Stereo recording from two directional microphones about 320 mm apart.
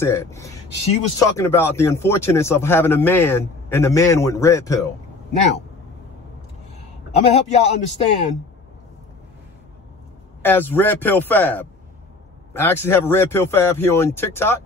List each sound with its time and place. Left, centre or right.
0.0 s speech: centre
7.1 s a man's voice: centre
10.4 s speech: centre